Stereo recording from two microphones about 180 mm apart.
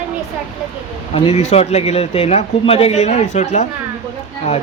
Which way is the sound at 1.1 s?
35° left (ahead or behind).